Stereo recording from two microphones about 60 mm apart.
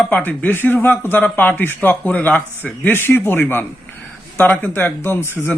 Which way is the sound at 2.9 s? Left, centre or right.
Left.